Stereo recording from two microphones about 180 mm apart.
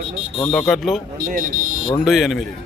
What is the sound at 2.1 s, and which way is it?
Speech, centre (ahead or behind).